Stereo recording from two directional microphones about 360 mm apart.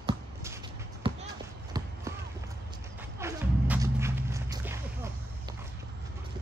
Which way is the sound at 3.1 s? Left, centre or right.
Centre.